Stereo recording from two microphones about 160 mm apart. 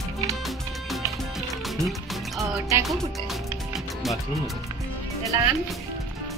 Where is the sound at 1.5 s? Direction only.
Centre (ahead or behind).